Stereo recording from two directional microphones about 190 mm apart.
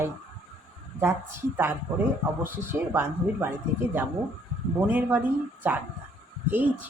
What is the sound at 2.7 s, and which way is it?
Speech, 10° right (ahead or behind).